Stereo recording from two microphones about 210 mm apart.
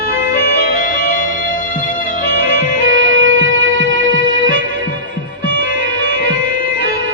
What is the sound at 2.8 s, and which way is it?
Music, 70° right (ahead or behind).